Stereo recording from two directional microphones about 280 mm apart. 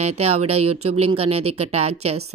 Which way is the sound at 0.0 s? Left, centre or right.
Right.